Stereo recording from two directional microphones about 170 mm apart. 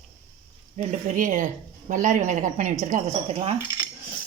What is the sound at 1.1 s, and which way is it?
A woman's voice, 50° right (ahead or behind).